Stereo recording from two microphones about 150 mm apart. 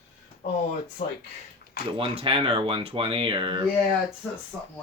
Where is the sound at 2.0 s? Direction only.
35° right (ahead or behind).